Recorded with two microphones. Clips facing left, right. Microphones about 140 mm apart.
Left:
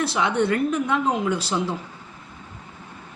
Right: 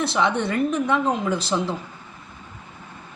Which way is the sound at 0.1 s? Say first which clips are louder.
Left 1 dB; 10° left (ahead or behind).